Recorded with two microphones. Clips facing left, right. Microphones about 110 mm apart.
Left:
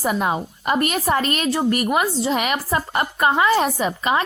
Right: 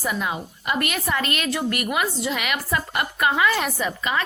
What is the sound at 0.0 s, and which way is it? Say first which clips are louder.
A woman's voice: left 5 dB; 45° left (ahead or behind).